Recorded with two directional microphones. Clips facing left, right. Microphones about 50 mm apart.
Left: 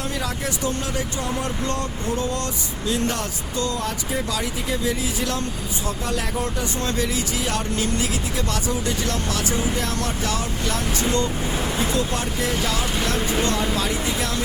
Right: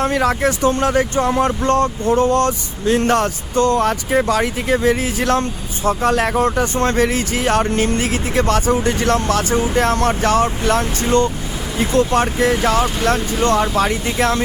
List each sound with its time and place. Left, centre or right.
0.0 s speech: right